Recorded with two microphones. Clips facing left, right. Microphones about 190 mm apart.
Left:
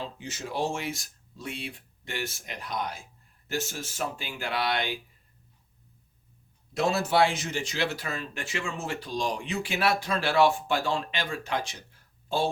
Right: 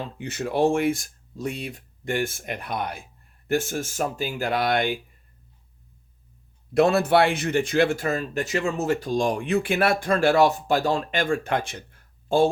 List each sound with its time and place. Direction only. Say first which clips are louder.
0.0 s speech: right 7 dB; 60° right (ahead or behind)
6.7 s speech: right 6 dB; 60° right (ahead or behind)